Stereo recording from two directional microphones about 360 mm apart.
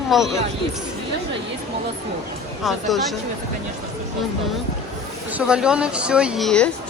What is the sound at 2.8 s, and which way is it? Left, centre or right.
Speech, centre.